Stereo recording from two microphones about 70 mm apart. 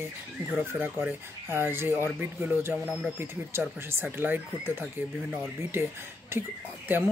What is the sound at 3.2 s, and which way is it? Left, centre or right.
Speech, right.